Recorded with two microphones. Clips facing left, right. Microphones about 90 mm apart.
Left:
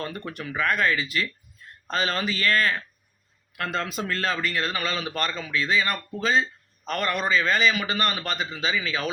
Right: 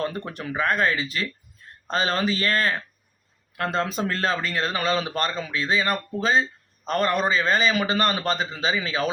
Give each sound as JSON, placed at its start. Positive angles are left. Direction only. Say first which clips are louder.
{"t": 0.5, "sound": "a man's voice", "louder": "right 1 dB", "side_deg": -30}